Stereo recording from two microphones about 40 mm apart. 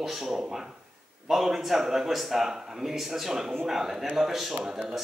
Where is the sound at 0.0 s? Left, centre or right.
Centre.